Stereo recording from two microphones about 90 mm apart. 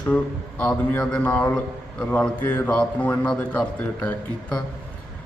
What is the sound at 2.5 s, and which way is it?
A man's voice, 15° left (ahead or behind).